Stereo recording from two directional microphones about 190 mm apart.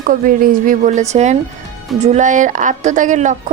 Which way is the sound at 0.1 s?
45° right (ahead or behind).